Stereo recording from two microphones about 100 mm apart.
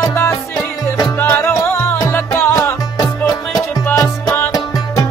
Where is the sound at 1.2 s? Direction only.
20° left (ahead or behind).